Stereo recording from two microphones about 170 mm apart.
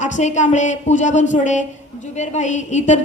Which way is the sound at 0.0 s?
45° left (ahead or behind).